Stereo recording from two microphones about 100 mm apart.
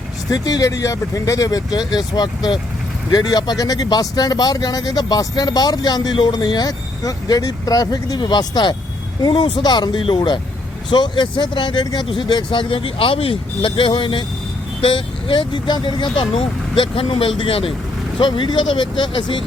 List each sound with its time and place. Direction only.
0.3 s speech: 40° left (ahead or behind)
12.0 s speech: 55° left (ahead or behind)
18.2 s speech: 50° left (ahead or behind)